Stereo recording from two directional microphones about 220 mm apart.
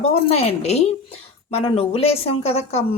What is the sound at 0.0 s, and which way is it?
Speech, 30° left (ahead or behind).